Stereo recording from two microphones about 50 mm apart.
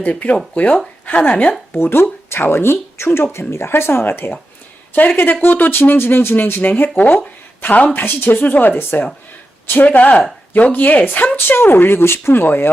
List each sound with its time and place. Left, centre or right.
0.0 s speech: left
1.7 s speech: left
4.9 s speech: left
6.0 s a woman's voice: left
7.9 s speech: left
9.8 s speech: left
11.3 s speech: left